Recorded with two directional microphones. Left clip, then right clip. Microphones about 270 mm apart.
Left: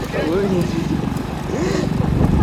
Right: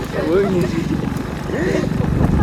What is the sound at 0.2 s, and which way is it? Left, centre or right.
Speech, centre.